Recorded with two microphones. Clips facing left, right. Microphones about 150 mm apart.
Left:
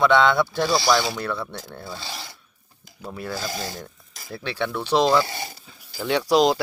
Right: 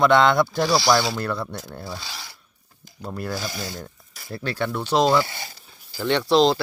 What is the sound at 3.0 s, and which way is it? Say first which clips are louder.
Speech: right 2 dB; centre (ahead or behind).